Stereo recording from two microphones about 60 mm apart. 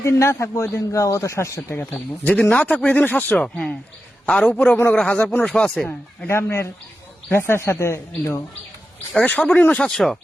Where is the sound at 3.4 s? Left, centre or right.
Centre.